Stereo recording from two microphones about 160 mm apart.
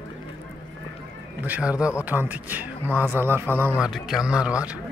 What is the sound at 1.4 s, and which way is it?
Speech, 10° right (ahead or behind).